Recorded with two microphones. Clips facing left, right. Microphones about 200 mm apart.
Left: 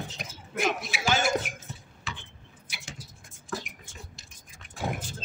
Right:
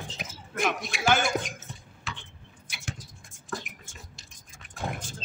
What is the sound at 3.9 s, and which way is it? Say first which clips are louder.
Tick-tock: left 3 dB; 45° right (ahead or behind).